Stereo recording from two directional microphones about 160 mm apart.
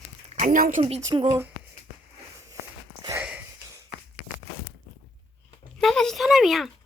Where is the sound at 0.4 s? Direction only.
55° right (ahead or behind).